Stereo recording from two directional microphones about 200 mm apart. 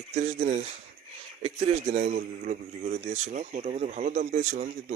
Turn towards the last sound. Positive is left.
turn(degrees=-40)  # may be behind; listen again after turning